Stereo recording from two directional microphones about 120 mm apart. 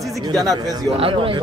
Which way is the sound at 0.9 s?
50° right (ahead or behind).